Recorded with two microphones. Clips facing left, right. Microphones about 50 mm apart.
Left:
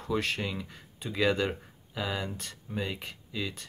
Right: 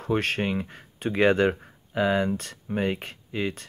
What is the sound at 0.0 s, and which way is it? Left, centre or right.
Speech, right.